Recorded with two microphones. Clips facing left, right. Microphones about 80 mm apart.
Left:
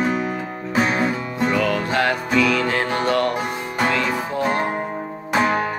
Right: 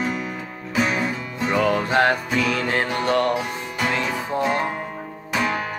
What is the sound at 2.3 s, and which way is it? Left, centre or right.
Music, left.